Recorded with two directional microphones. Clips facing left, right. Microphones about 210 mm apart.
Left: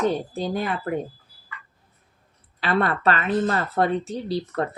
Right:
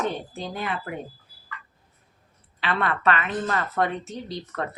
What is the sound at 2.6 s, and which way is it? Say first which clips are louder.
Speech: left 4 dB; 40° left (ahead or behind).